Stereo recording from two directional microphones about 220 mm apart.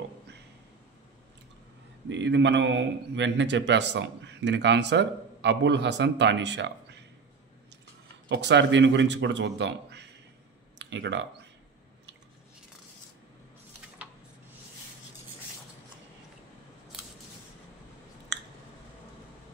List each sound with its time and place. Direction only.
2.0 s a man's voice: 55° right (ahead or behind)
8.3 s a man's voice: 50° right (ahead or behind)
18.3 s a sound: 55° right (ahead or behind)